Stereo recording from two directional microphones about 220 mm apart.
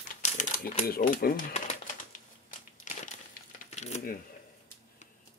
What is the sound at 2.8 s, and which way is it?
Crumpling, 35° left (ahead or behind).